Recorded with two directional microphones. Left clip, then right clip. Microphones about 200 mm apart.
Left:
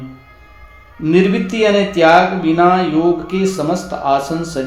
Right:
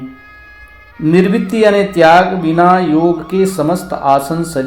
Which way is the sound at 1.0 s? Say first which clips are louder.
Right 2 dB; 30° right (ahead or behind).